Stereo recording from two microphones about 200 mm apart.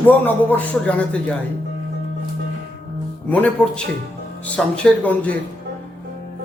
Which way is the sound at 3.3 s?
5° left (ahead or behind).